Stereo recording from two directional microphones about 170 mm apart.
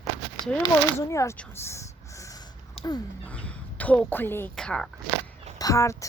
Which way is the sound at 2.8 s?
35° left (ahead or behind).